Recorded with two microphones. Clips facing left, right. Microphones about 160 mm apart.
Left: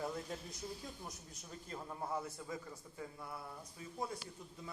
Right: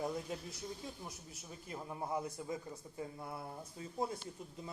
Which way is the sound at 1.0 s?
5° right (ahead or behind).